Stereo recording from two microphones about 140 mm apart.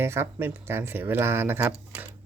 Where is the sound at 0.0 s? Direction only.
15° right (ahead or behind).